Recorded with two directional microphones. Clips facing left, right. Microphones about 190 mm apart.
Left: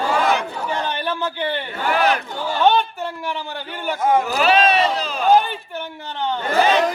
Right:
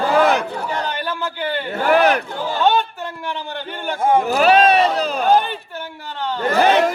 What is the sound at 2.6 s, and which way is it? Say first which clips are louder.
A man's voice: left 1 dB; 15° left (ahead or behind).